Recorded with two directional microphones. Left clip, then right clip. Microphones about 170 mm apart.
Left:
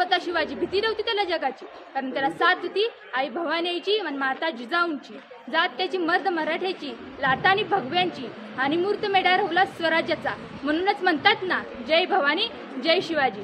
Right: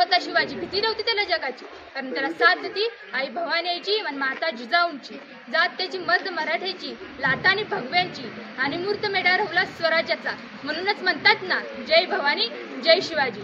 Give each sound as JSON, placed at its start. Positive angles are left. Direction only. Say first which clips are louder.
{"t": 0.0, "sound": "a woman's voice", "louder": "right 3 dB", "side_deg": 20}